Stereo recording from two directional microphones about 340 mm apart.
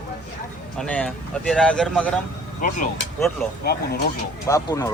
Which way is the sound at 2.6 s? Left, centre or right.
Left.